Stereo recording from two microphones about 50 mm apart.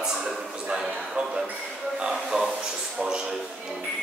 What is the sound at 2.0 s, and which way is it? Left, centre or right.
A man's voice, centre.